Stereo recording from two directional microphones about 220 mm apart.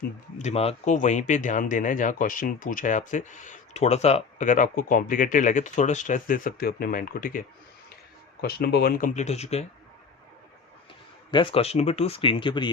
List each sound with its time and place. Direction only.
0.0 s speech: 30° left (ahead or behind)
11.3 s speech: 20° left (ahead or behind)